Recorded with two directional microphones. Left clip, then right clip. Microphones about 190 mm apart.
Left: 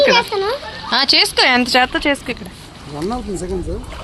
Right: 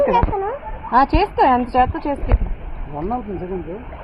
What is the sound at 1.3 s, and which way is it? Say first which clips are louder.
Speech: left 2 dB; 30° left (ahead or behind).